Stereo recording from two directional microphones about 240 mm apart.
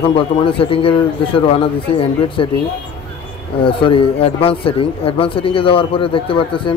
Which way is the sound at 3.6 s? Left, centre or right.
Left.